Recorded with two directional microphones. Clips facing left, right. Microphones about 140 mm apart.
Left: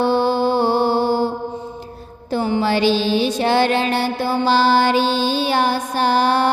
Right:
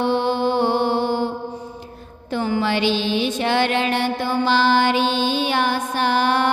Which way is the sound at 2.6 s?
40° left (ahead or behind).